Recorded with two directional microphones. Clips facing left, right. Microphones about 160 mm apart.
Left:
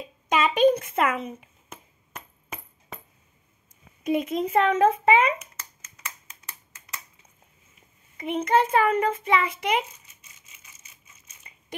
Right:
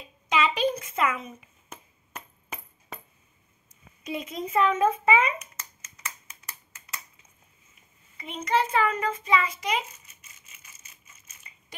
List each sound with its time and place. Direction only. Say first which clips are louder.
0.3 s a sound: left 5 dB; 50° left (ahead or behind); by 1.5 s 65° left (ahead or behind)
4.0 s a woman's voice: left 8 dB; 50° left (ahead or behind)
4.6 s a child's voice: left 2 dB; 70° left (ahead or behind)
8.2 s a child's voice: left 4 dB; 55° left (ahead or behind)